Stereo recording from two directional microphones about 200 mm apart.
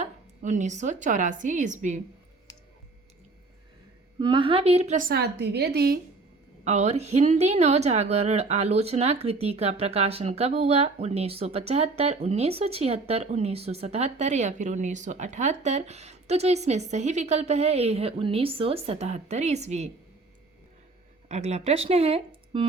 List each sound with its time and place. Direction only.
0.0 s a woman's voice: 35° right (ahead or behind)
4.2 s a woman's voice: 25° right (ahead or behind); by 6.0 s 55° right (ahead or behind)
6.7 s a woman's voice: 35° right (ahead or behind)
21.2 s speech: 35° right (ahead or behind)